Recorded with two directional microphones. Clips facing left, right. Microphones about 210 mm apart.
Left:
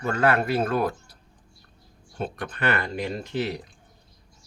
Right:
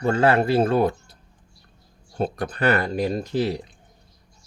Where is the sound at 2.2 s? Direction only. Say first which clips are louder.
Right 6 dB; 35° right (ahead or behind).